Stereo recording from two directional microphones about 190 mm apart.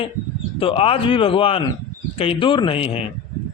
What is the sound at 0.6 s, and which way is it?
A man's voice, 30° left (ahead or behind).